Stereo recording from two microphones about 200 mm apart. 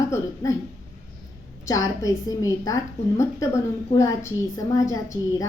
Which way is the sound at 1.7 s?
15° left (ahead or behind).